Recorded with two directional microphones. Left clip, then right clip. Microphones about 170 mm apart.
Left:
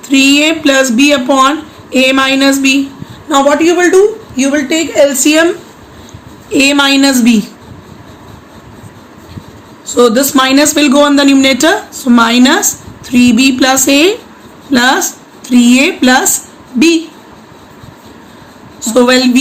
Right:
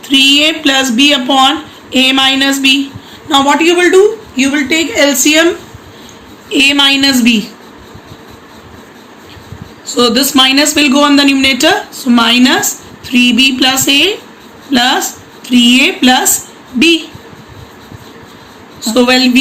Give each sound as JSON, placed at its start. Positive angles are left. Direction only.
{"t": 0.1, "sound": "a woman's voice", "side_deg": 55}
{"t": 6.5, "sound": "a woman's voice", "side_deg": 55}
{"t": 9.9, "sound": "speech", "side_deg": 55}
{"t": 18.9, "sound": "speech", "side_deg": 55}